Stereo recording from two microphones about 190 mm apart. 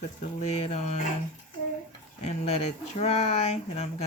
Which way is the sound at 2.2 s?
35° left (ahead or behind).